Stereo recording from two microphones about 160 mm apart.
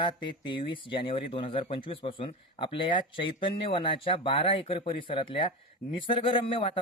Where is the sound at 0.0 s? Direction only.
30° left (ahead or behind).